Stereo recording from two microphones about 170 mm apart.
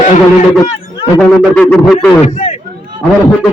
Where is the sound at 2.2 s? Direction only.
40° left (ahead or behind).